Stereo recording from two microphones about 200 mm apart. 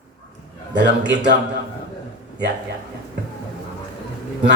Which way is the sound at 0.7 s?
60° right (ahead or behind).